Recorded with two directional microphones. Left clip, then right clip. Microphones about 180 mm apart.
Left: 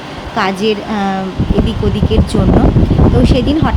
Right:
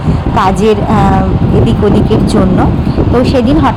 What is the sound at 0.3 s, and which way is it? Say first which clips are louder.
Speech: right 5 dB; 20° right (ahead or behind).